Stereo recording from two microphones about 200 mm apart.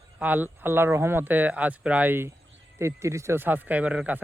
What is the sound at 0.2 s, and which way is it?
Speech, 10° right (ahead or behind).